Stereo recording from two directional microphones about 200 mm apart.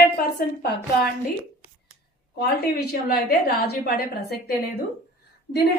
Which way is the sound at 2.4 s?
50° left (ahead or behind).